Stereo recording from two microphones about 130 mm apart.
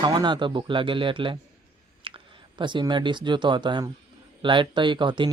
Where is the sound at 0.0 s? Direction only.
35° right (ahead or behind).